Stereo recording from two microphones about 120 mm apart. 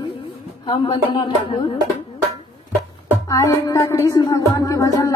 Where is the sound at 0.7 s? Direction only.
45° left (ahead or behind).